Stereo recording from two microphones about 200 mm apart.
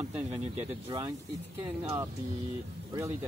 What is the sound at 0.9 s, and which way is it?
Speech, 15° right (ahead or behind).